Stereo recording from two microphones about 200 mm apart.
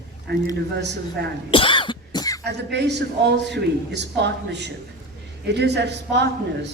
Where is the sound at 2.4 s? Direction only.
60° right (ahead or behind).